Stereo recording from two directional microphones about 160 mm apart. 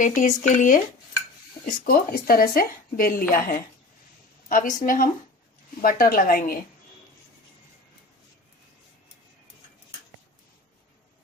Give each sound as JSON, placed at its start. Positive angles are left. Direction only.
{"t": 0.0, "sound": "speech", "side_deg": 50}
{"t": 1.9, "sound": "speech", "side_deg": 70}